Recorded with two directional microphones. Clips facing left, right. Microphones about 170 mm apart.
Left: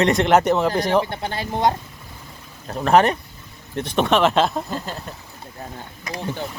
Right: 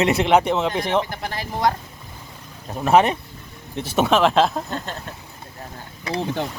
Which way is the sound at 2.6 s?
5° right (ahead or behind).